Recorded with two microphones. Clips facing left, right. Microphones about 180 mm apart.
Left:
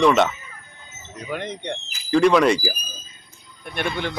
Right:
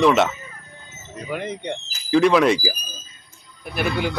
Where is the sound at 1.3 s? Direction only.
5° right (ahead or behind).